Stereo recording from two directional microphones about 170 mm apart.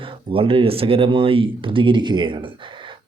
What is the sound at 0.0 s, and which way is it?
Speech, 30° right (ahead or behind).